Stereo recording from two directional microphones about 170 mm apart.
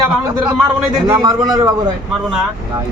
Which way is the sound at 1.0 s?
20° right (ahead or behind).